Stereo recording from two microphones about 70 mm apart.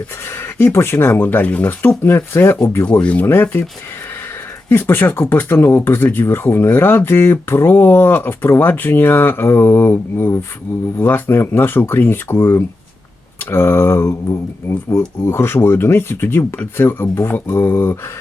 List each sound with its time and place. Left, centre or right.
0.6 s speech: left
1.9 s speech: left
3.0 s speech: centre
3.2 s speech: left
4.7 s speech: left
14.0 s speech: left